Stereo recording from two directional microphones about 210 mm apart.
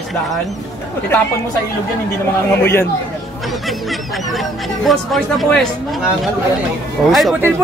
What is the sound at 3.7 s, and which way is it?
A man's voice, centre (ahead or behind).